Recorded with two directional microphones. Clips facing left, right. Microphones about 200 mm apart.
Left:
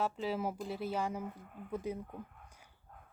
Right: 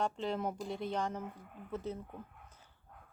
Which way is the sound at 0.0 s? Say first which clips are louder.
Even; 5° left (ahead or behind).